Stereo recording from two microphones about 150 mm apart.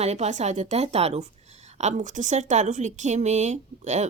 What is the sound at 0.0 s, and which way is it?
A woman's voice, 45° right (ahead or behind).